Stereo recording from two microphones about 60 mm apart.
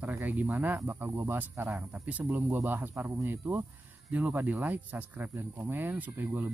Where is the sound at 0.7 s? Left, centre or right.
Right.